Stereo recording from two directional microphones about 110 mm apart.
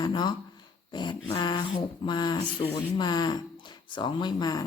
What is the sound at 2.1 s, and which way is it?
Speech, 40° left (ahead or behind).